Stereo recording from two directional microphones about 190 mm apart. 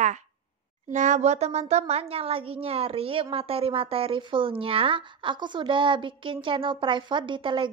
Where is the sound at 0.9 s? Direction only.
40° right (ahead or behind).